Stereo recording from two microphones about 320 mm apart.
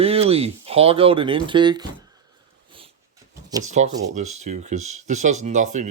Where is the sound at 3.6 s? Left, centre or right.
Right.